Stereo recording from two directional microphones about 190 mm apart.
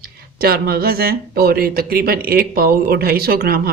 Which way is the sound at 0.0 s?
55° right (ahead or behind).